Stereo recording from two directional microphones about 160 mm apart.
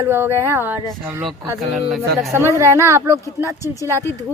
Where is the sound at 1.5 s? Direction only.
Centre (ahead or behind).